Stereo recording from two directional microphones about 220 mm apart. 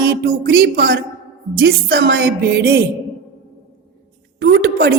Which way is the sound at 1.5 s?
45° right (ahead or behind).